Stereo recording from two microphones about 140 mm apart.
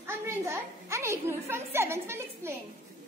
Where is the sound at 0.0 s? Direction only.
15° right (ahead or behind).